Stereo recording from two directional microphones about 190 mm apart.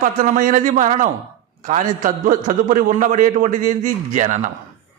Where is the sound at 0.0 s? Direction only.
45° right (ahead or behind).